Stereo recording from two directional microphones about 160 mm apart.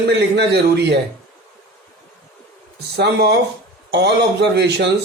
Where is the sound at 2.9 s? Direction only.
90° right.